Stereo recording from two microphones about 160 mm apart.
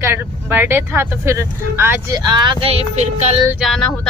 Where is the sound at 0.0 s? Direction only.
15° right (ahead or behind).